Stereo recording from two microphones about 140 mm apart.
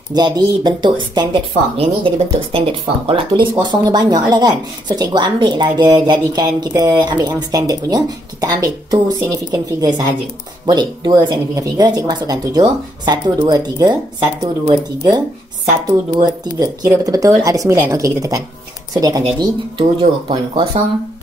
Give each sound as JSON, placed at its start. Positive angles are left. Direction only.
{"t": 0.1, "sound": "speech", "side_deg": -30}
{"t": 19.8, "sound": "speech", "side_deg": -40}